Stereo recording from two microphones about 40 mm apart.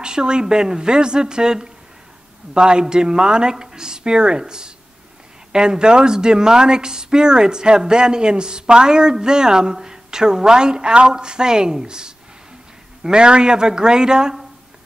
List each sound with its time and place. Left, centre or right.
0.0 s speech: right